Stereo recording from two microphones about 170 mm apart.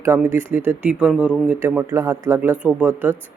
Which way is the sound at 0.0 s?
15° right (ahead or behind).